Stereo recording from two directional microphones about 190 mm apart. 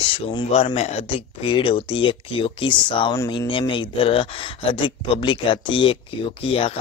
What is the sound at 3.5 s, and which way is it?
Speech, 25° left (ahead or behind).